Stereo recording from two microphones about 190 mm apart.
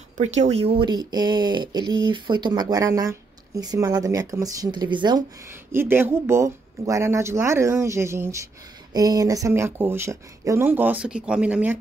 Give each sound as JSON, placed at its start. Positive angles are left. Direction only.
{"t": 0.2, "sound": "speech", "side_deg": -35}
{"t": 5.7, "sound": "speech", "side_deg": -10}